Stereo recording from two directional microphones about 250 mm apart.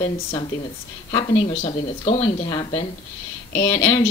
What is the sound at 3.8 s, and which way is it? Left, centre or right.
Speech, centre.